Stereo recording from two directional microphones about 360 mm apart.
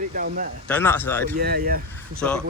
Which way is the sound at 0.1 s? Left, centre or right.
Right.